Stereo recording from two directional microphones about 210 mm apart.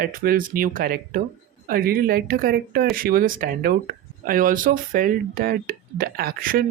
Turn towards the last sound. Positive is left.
turn(degrees=-45)  # may be behind; listen again after turning